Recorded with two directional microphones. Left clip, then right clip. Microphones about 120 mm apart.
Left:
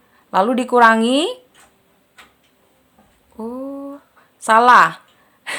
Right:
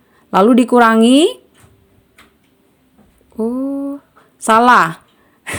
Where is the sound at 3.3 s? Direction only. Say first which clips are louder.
Right 8 dB; 35° right (ahead or behind).